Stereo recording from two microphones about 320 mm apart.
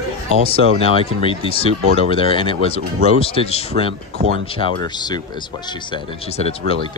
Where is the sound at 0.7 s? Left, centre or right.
Centre.